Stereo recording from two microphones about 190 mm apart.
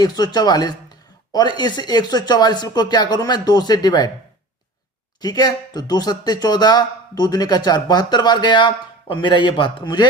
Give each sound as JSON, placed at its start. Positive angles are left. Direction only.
{"t": 0.0, "sound": "speech", "side_deg": 20}
{"t": 5.2, "sound": "speech", "side_deg": 20}